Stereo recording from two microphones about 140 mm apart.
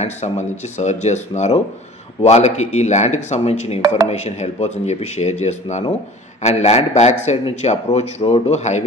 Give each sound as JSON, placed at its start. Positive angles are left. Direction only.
{"t": 0.0, "sound": "a man's voice", "side_deg": 55}